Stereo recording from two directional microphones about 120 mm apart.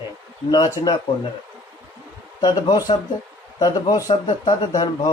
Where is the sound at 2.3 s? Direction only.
40° left (ahead or behind).